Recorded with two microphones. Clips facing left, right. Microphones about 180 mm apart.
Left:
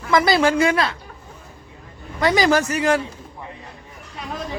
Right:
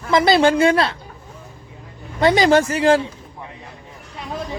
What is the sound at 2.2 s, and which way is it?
Speech, 25° right (ahead or behind).